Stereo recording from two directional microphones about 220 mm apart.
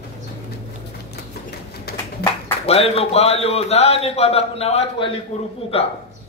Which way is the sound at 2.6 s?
25° left (ahead or behind).